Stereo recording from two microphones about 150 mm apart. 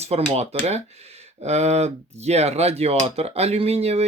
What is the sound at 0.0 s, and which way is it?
Speech, 45° right (ahead or behind).